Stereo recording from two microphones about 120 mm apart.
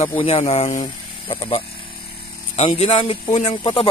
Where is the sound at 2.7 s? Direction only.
50° left (ahead or behind).